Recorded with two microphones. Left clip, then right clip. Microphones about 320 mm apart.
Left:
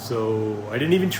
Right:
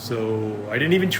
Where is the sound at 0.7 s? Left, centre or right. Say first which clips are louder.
Right 2 dB; centre.